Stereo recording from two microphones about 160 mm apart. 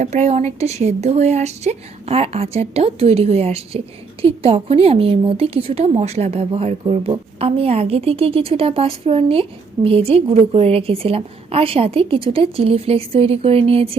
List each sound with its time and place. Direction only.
0.0 s speech: 45° right (ahead or behind)